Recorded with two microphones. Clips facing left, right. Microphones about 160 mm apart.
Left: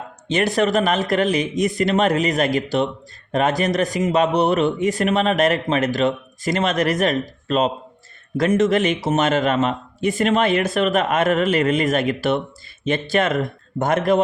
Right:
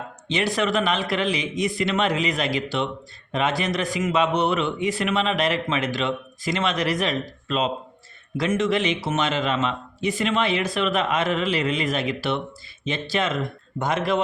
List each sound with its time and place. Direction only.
0.3 s a man's voice: 45° left (ahead or behind)